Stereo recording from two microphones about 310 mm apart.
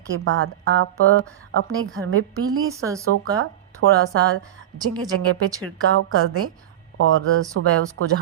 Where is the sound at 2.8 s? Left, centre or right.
Centre.